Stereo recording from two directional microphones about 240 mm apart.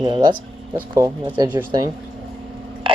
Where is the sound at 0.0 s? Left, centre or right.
Right.